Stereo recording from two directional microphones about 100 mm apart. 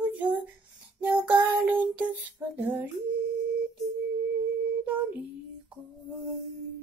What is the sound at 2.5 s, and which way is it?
Female singing, 20° right (ahead or behind).